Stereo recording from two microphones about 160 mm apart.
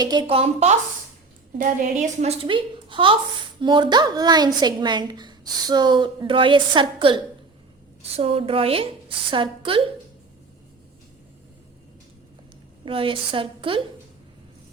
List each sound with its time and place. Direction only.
0.0 s a woman's voice: 25° right (ahead or behind)
1.5 s a woman's voice: 50° right (ahead or behind)
2.4 s a woman's voice: 30° right (ahead or behind)
12.8 s a woman's voice: 35° right (ahead or behind)